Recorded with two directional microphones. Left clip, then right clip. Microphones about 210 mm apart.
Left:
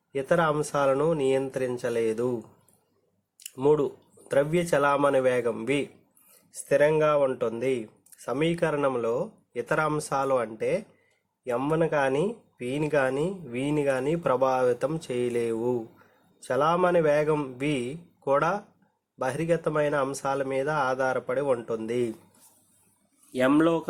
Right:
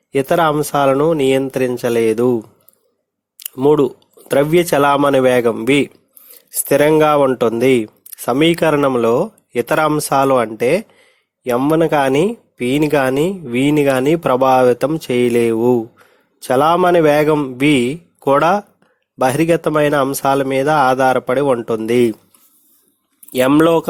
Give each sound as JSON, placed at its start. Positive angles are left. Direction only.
{"t": 0.1, "sound": "speech", "side_deg": -50}
{"t": 3.5, "sound": "speech", "side_deg": -40}
{"t": 23.3, "sound": "speech", "side_deg": -50}